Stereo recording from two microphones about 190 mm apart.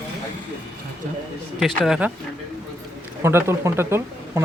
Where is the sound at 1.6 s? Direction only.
Centre (ahead or behind).